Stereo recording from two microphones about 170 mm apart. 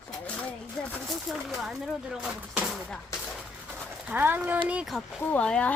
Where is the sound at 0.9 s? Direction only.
Centre (ahead or behind).